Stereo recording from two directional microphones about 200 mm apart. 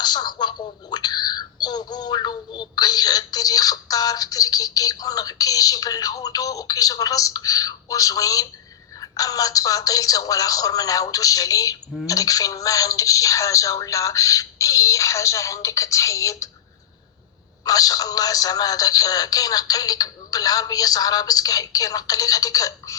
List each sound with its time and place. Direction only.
0.0 s a sound: 20° left (ahead or behind)
9.0 s speech: 20° left (ahead or behind)
17.7 s speech: 20° left (ahead or behind)